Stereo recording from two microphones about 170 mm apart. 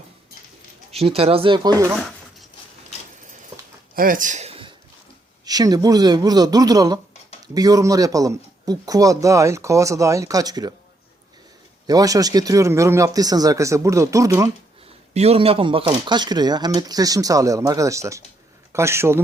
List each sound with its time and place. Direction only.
0.9 s speech: 35° right (ahead or behind); by 2.0 s 20° right (ahead or behind)
3.5 s a sound: 35° right (ahead or behind)
3.9 s speech: 55° right (ahead or behind); by 4.7 s 35° right (ahead or behind)
5.5 s speech: 20° right (ahead or behind)
11.9 s speech: 20° right (ahead or behind)
15.1 s a man's voice: 40° right (ahead or behind); by 19.2 s 15° right (ahead or behind)